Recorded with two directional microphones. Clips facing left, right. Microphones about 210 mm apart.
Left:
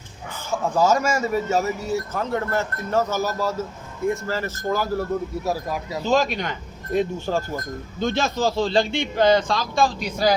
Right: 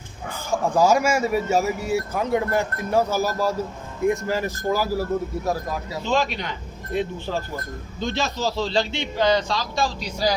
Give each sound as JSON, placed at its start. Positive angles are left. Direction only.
{"t": 0.3, "sound": "speech", "side_deg": -10}
{"t": 6.1, "sound": "a man's voice", "side_deg": 45}